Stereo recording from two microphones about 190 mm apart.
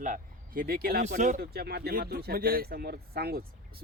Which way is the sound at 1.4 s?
55° right (ahead or behind).